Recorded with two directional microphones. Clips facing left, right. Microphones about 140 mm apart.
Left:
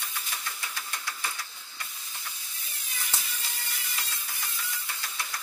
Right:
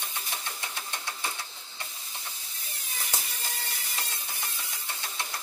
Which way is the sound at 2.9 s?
40° right (ahead or behind).